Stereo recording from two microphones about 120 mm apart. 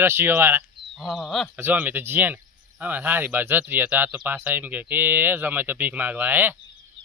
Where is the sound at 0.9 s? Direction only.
Centre (ahead or behind).